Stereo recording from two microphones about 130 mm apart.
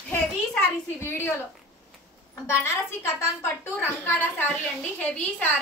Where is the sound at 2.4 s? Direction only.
20° left (ahead or behind).